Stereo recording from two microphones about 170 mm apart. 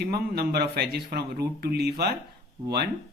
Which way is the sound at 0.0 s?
70° right (ahead or behind).